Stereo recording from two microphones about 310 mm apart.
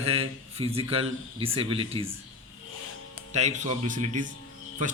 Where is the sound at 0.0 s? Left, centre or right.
Centre.